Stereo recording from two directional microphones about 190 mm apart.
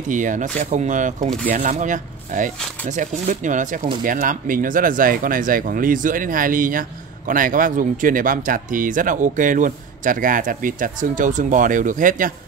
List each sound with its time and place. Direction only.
0.1 s speech: 40° right (ahead or behind)